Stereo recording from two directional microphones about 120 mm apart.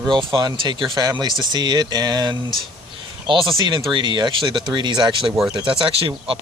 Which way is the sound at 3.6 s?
40° right (ahead or behind).